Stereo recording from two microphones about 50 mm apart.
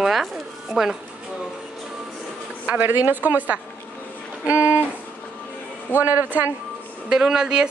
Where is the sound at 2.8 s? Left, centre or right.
Right.